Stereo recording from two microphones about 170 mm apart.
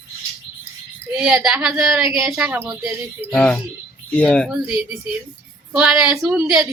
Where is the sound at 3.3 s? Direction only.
5° left (ahead or behind).